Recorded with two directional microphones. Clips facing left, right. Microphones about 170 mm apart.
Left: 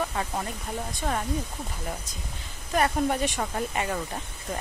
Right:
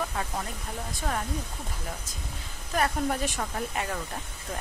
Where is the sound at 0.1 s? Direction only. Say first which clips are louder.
Left 2 dB; 5° left (ahead or behind).